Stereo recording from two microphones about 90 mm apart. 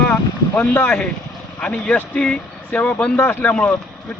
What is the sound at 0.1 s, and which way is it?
Boat, 20° left (ahead or behind).